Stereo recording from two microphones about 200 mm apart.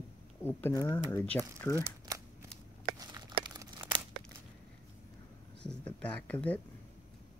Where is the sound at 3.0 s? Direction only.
20° right (ahead or behind).